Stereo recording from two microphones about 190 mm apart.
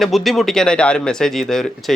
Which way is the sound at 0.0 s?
Centre (ahead or behind).